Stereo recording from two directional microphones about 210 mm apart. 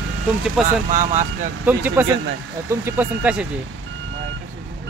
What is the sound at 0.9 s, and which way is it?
Speech, 40° right (ahead or behind).